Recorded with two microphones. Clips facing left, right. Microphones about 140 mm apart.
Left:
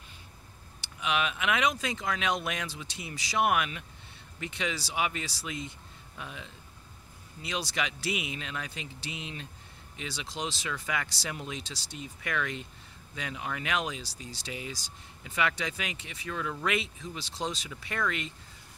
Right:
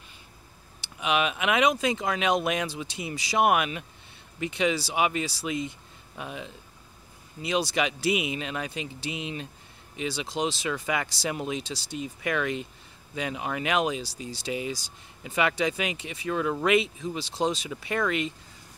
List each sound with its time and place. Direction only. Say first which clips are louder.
1.0 s speech: right 4 dB; 15° right (ahead or behind)
7.7 s speech: right 7 dB; 15° right (ahead or behind)
17.2 s speech: right 8 dB; 60° right (ahead or behind)
17.6 s speech: right 6 dB; 15° right (ahead or behind)